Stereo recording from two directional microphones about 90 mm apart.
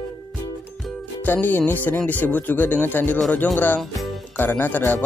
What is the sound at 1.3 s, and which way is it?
Speech, 20° left (ahead or behind).